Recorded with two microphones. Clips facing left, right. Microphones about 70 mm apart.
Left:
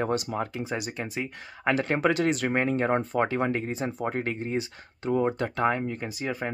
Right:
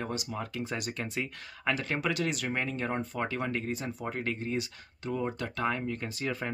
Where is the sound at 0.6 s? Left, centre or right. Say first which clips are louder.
Left 3 dB; centre.